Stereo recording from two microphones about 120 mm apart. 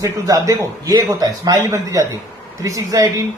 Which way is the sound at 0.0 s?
30° right (ahead or behind).